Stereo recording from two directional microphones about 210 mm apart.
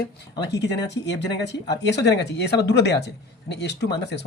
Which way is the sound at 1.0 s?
55° left (ahead or behind).